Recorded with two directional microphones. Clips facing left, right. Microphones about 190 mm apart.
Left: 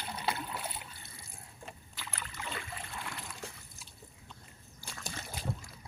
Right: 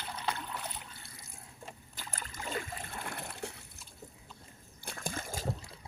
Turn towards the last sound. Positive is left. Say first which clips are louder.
# right 2 dB
turn(degrees=-35)  # may be behind; listen again after turning